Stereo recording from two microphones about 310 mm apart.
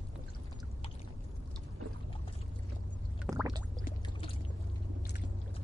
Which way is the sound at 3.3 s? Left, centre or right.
Centre.